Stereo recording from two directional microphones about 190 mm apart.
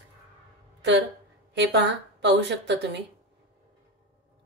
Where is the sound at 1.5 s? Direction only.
65° right (ahead or behind).